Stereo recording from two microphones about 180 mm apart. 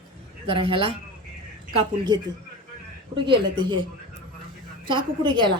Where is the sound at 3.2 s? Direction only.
25° right (ahead or behind).